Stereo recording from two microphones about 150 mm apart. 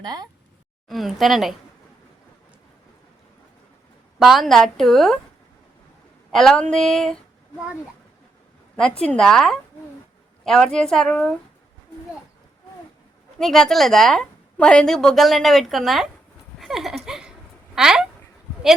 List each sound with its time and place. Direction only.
0.0 s speech: 25° right (ahead or behind)
0.9 s a woman's voice: centre (ahead or behind)
4.2 s a woman's voice: centre (ahead or behind)
6.3 s a woman's voice: 5° left (ahead or behind)
8.7 s a woman's voice: 5° left (ahead or behind)
13.4 s a woman's voice: centre (ahead or behind)
16.6 s a sound: centre (ahead or behind)
17.7 s speech: 5° right (ahead or behind)